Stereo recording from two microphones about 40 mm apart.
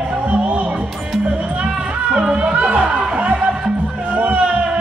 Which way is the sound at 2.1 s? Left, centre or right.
Right.